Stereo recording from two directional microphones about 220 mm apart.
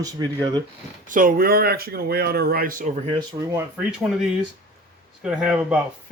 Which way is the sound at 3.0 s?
15° right (ahead or behind).